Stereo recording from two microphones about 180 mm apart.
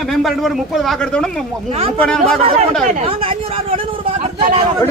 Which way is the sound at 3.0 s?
30° right (ahead or behind).